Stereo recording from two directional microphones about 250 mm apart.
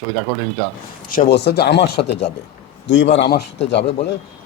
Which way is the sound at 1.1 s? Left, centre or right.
Left.